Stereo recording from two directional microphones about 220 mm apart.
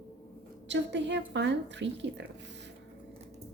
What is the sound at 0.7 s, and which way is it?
A woman's voice, 50° right (ahead or behind).